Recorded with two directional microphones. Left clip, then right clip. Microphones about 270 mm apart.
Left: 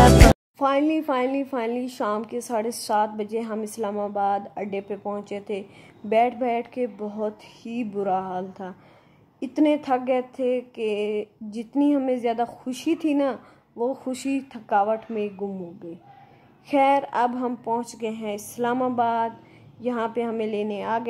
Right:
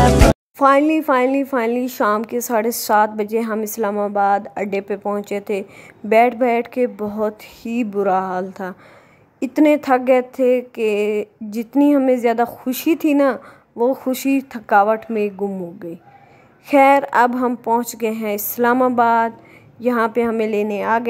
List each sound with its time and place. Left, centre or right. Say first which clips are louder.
0.6 s speech: right 8 dB; centre